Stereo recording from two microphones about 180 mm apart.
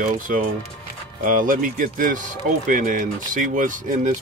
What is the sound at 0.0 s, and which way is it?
Speech, 50° right (ahead or behind).